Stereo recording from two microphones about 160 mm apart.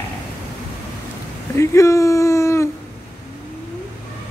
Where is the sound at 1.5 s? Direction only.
20° left (ahead or behind).